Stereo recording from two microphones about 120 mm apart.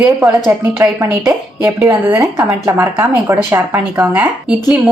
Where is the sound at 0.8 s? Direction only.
25° right (ahead or behind).